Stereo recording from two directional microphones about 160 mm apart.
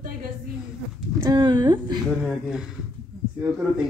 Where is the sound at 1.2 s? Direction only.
25° right (ahead or behind).